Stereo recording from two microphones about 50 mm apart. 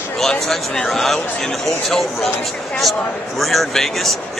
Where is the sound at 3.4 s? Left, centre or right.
Centre.